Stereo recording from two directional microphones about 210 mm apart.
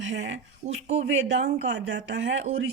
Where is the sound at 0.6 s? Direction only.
30° right (ahead or behind).